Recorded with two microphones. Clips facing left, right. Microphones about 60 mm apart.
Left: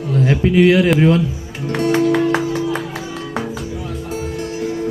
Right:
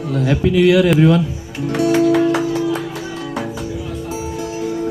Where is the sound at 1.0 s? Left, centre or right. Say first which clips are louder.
Right 1 dB; left.